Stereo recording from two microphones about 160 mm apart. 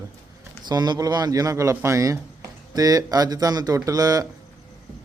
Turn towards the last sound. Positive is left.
turn(degrees=-20)  # may be behind; listen again after turning